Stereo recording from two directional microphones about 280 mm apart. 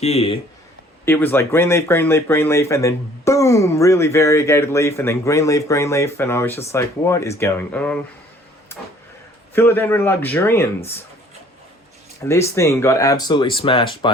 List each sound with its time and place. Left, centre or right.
0.0 s speech: left
1.0 s speech: centre
9.6 s speech: centre
12.2 s speech: centre